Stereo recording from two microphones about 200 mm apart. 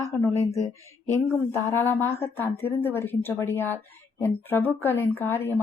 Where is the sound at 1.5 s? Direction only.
10° left (ahead or behind).